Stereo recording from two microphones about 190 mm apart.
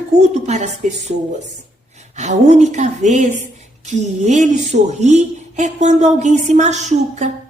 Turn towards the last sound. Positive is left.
turn(degrees=-40)  # may be behind; listen again after turning